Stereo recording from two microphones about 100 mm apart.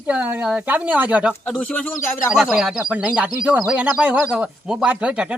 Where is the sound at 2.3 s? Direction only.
5° right (ahead or behind).